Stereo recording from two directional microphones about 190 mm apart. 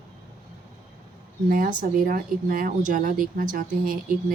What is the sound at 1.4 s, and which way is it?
Speech, 45° right (ahead or behind).